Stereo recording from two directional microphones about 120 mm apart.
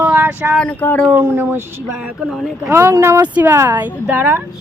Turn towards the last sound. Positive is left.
turn(degrees=-15)  # may be behind; listen again after turning